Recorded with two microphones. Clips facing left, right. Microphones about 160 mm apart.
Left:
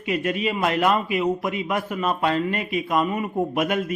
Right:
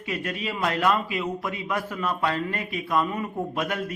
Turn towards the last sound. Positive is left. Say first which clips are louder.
# left 5 dB
turn(degrees=20)  # may be behind; listen again after turning